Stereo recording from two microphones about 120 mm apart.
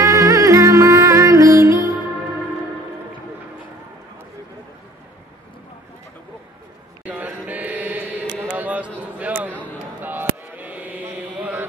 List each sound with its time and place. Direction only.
0.0 s music: 30° right (ahead or behind)
7.1 s chant: 15° right (ahead or behind)
8.4 s a sound: 15° right (ahead or behind)
10.0 s chant: 15° right (ahead or behind)